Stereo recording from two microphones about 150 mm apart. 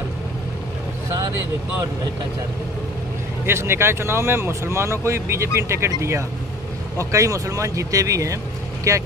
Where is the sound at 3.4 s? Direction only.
15° right (ahead or behind).